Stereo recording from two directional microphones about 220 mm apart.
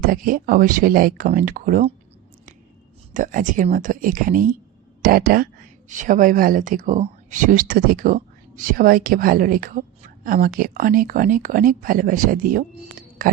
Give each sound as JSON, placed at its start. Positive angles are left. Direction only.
{"t": 0.0, "sound": "speech", "side_deg": -40}
{"t": 3.1, "sound": "speech", "side_deg": -35}